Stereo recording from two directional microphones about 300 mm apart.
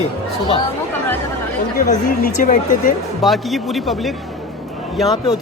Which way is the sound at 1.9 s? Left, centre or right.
Left.